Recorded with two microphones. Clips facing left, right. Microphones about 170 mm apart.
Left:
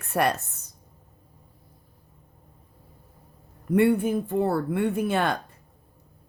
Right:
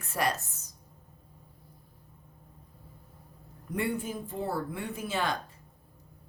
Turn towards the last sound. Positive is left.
turn(degrees=60)  # may be behind; listen again after turning